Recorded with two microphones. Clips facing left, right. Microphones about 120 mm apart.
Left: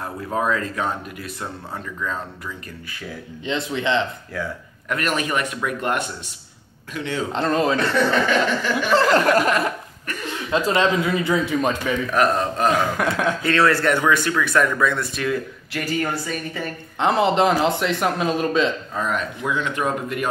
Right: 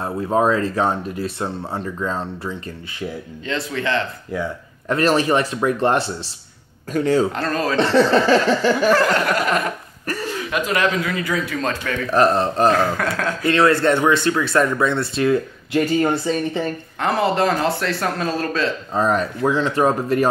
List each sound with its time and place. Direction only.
0.0 s speech: 30° right (ahead or behind)
3.4 s a man's voice: 20° left (ahead or behind)
4.8 s speech: 30° right (ahead or behind)
7.3 s a man's voice: 20° left (ahead or behind)
7.7 s speech: 30° right (ahead or behind)
9.1 s a sound: 40° left (ahead or behind)
10.5 s a man's voice: 25° left (ahead or behind)
12.1 s speech: 30° right (ahead or behind)
12.7 s speech: 15° left (ahead or behind)
13.5 s speech: 20° right (ahead or behind)
17.0 s speech: 20° left (ahead or behind)
18.9 s speech: 35° right (ahead or behind)